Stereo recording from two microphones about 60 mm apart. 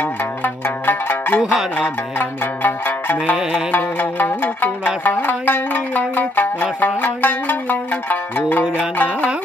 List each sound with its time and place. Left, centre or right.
0.0 s music: left
1.4 s music: centre
1.8 s music: left
3.7 s zither: left